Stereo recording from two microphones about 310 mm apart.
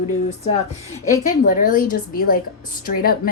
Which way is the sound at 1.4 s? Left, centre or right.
Left.